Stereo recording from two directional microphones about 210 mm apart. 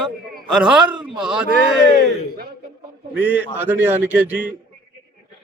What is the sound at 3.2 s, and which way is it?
A man's voice, 10° right (ahead or behind).